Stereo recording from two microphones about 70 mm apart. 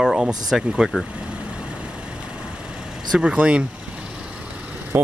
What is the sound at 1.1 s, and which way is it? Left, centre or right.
Vehicle, centre.